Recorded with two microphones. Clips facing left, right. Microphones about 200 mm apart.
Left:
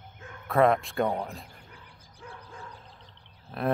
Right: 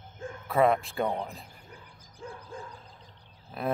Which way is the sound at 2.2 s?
45° right (ahead or behind).